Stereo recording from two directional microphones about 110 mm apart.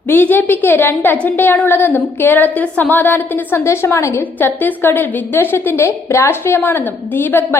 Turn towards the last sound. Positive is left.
turn(degrees=20)  # may be behind; listen again after turning